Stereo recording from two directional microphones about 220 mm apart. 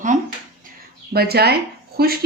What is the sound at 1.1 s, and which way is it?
Speech, 45° right (ahead or behind).